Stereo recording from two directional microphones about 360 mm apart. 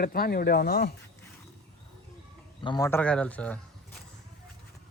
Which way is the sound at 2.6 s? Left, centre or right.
Centre.